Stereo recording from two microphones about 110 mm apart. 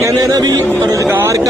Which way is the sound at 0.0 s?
35° right (ahead or behind).